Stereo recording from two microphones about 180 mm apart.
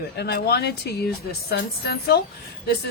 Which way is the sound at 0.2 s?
60° left (ahead or behind).